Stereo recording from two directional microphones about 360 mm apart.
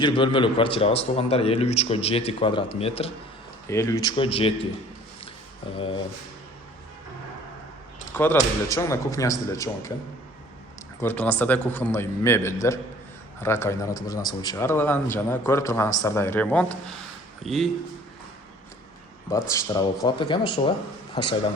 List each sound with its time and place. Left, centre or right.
0.0 s a man's voice: centre
5.7 s a man's voice: centre
8.1 s a man's voice: centre
11.0 s a man's voice: centre
19.3 s a man's voice: centre